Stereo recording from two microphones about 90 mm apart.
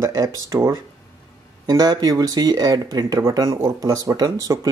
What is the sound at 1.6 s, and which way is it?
Speech, 45° right (ahead or behind).